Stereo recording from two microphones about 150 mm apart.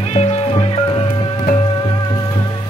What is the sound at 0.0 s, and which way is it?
Music, 45° left (ahead or behind).